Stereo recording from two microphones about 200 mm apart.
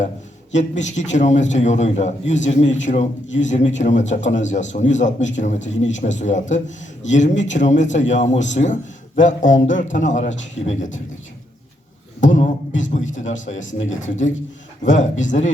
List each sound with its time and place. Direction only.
0.5 s a man's voice: 35° left (ahead or behind)
12.2 s a sound: 40° left (ahead or behind)
12.8 s a man's voice: 35° left (ahead or behind)